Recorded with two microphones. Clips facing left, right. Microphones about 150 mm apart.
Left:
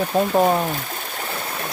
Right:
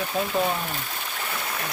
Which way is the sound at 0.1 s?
45° left (ahead or behind).